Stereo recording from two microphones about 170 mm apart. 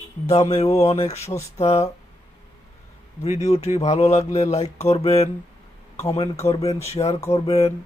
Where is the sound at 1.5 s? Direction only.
40° left (ahead or behind).